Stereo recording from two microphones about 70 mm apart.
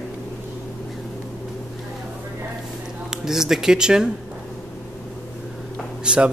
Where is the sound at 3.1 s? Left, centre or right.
Centre.